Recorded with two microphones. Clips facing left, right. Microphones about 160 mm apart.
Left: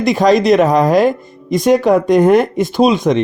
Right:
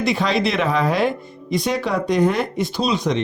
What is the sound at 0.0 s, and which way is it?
Speech, 45° left (ahead or behind).